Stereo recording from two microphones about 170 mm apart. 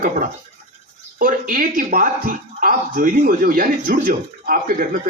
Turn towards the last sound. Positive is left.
turn(degrees=-55)  # may be behind; listen again after turning